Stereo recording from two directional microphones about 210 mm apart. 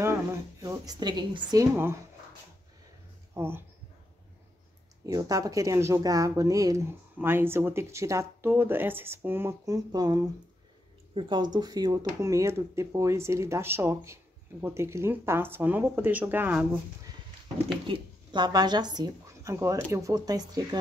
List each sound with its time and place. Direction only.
0.0 s speech: 10° right (ahead or behind)
3.3 s speech: 10° right (ahead or behind)
5.0 s speech: 15° right (ahead or behind)
17.8 s speech: 25° right (ahead or behind)